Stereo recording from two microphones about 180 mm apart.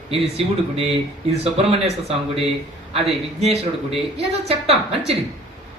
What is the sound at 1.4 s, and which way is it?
Speech, 35° right (ahead or behind).